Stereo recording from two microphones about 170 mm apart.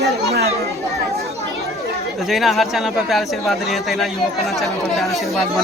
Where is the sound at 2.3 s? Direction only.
Centre (ahead or behind).